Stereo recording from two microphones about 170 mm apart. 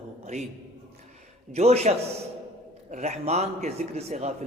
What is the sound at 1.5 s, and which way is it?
A man's voice, 40° right (ahead or behind).